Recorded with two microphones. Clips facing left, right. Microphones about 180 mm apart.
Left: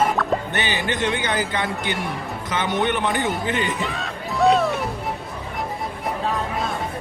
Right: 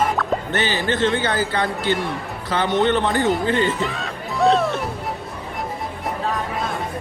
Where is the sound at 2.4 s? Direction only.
20° left (ahead or behind).